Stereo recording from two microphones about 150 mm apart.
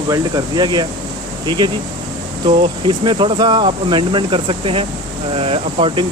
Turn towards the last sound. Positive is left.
turn(degrees=-40)  # may be behind; listen again after turning